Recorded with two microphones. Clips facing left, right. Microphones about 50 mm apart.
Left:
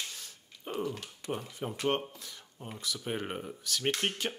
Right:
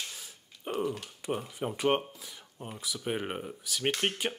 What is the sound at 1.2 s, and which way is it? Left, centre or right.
Speech, centre.